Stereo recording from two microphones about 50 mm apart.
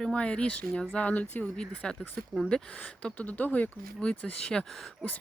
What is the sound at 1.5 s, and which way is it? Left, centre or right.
Speech, centre.